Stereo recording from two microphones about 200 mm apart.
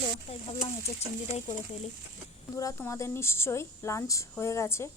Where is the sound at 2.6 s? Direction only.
15° left (ahead or behind).